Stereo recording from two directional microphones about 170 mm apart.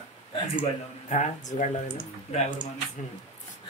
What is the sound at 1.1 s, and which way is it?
Speech, 45° left (ahead or behind).